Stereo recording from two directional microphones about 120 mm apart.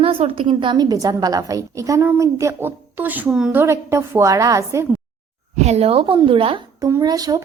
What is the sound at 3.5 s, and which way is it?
A woman's voice, 25° right (ahead or behind).